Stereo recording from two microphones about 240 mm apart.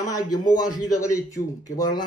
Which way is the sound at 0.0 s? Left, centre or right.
Centre.